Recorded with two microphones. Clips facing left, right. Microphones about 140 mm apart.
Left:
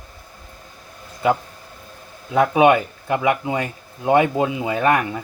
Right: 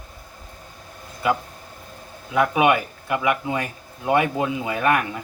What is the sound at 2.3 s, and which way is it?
Speech, 25° left (ahead or behind).